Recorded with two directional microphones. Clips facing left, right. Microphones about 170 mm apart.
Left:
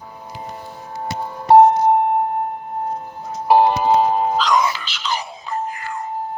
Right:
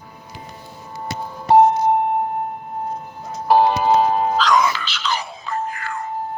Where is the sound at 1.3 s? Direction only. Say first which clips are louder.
Left 3 dB; 50° left (ahead or behind).